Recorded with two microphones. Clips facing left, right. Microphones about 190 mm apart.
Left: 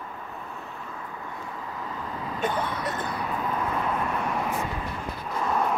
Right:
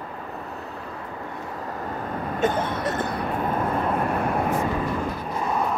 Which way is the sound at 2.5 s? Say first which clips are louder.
Right 4 dB; 45° right (ahead or behind).